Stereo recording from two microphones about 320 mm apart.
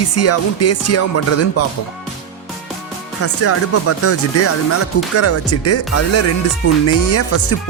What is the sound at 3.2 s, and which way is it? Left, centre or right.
Speech, left.